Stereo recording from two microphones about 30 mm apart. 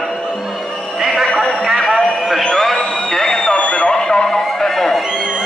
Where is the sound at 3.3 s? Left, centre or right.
Left.